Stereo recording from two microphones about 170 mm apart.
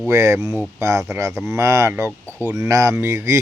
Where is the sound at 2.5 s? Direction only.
20° right (ahead or behind).